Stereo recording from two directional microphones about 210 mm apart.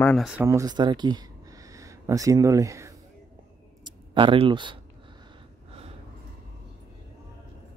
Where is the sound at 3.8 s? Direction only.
25° right (ahead or behind).